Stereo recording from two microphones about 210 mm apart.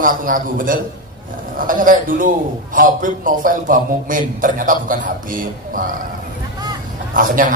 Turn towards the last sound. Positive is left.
turn(degrees=-40)  # may be behind; listen again after turning